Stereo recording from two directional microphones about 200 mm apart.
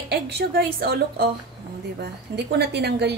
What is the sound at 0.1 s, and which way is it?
A woman's voice, 55° right (ahead or behind).